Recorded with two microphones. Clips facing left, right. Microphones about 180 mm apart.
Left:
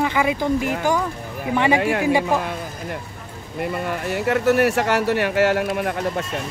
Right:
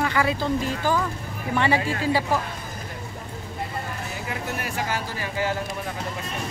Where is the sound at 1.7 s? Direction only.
75° left (ahead or behind).